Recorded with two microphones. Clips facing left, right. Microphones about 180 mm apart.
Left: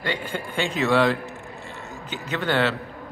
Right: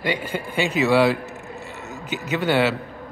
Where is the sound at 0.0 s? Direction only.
10° right (ahead or behind).